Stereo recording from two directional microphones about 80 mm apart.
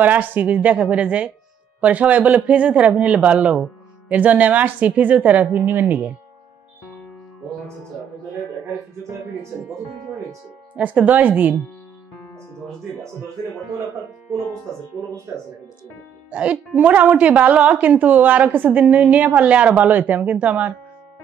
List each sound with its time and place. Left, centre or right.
0.0 s speech: right
10.8 s speech: centre
16.3 s speech: centre